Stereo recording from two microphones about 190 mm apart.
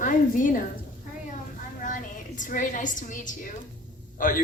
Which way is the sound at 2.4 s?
45° left (ahead or behind).